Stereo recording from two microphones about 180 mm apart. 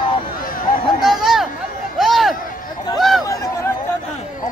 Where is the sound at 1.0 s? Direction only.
Centre (ahead or behind).